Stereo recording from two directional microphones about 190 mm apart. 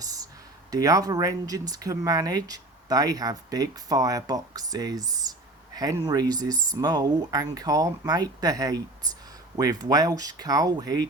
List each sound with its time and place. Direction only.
0.0 s speech: 20° right (ahead or behind)